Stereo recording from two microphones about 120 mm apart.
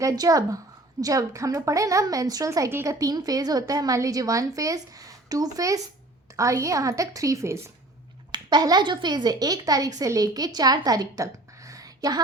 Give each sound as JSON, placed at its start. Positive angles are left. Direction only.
{"t": 0.0, "sound": "a woman's voice", "side_deg": -30}
{"t": 8.3, "sound": "speech", "side_deg": -35}